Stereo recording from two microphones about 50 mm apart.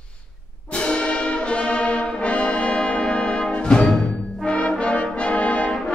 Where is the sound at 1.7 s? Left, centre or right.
Left.